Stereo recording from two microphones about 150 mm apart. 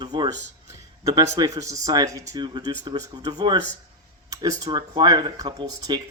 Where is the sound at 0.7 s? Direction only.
20° right (ahead or behind).